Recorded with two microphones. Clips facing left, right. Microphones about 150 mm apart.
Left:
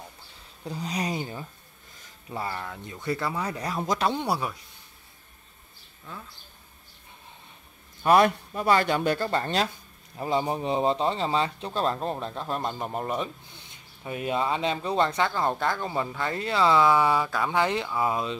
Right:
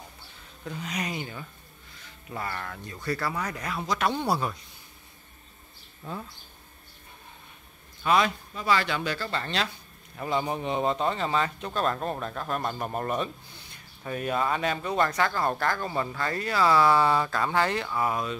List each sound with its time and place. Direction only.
0.7 s speech: 35° left (ahead or behind)
2.5 s speech: 15° left (ahead or behind); by 4.0 s 40° left (ahead or behind)
4.1 s speech: 10° left (ahead or behind)
8.0 s speech: 55° left (ahead or behind)
10.1 s speech: 30° left (ahead or behind)